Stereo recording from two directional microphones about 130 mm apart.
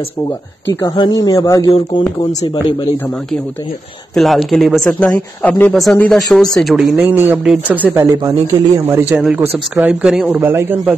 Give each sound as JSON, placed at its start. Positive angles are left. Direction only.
{"t": 0.8, "sound": "a man's voice", "side_deg": 35}
{"t": 4.1, "sound": "a man's voice", "side_deg": 0}
{"t": 9.1, "sound": "a man's voice", "side_deg": -10}